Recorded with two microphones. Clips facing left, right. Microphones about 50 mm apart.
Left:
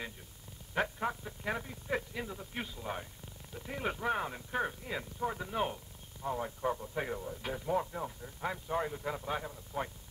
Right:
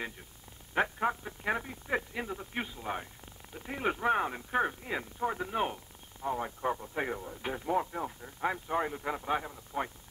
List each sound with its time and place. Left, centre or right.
0.7 s speech: centre